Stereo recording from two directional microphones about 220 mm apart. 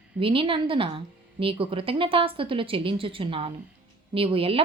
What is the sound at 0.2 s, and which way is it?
A woman's voice, 25° right (ahead or behind).